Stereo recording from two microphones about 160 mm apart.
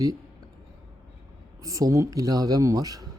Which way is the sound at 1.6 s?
20° right (ahead or behind).